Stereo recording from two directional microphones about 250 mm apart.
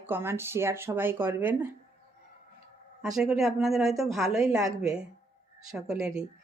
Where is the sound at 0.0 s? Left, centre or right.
Centre.